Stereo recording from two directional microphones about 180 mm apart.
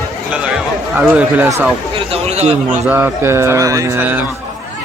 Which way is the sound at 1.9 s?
35° right (ahead or behind).